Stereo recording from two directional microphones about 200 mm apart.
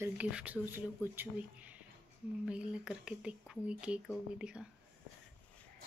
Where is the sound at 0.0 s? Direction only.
5° right (ahead or behind).